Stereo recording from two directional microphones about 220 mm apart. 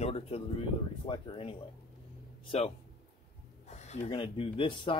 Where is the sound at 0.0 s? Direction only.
25° left (ahead or behind).